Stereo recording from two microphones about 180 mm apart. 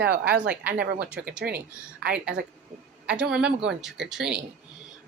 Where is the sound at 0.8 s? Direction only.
60° right (ahead or behind).